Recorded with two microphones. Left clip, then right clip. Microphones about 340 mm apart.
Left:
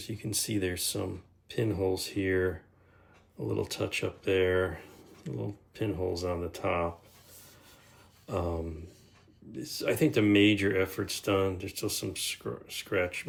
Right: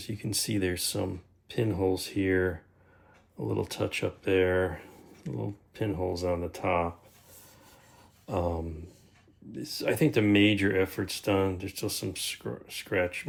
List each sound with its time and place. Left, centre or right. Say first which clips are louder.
0.0 s speech: right 2 dB; centre
8.3 s speech: right 2 dB; centre